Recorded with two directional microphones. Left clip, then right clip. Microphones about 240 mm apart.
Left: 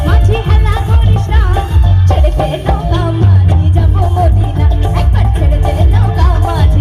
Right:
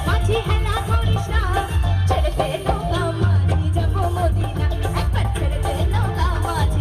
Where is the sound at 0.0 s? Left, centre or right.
Left.